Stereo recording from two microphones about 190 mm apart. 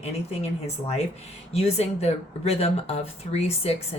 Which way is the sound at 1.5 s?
35° left (ahead or behind).